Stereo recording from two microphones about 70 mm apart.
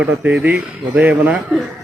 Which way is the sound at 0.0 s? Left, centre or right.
Right.